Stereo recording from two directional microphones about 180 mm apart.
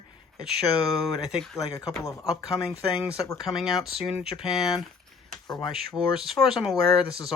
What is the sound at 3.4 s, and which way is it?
Speech, centre (ahead or behind).